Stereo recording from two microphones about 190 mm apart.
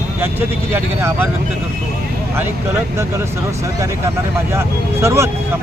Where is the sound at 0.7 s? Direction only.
15° right (ahead or behind).